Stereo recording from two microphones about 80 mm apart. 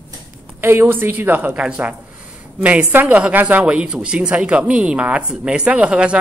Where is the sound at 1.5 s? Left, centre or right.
Centre.